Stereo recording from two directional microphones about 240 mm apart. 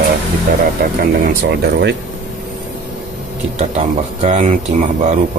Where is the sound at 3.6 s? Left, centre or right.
Right.